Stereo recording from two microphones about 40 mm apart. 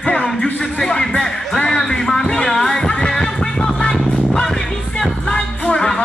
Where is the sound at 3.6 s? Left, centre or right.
Left.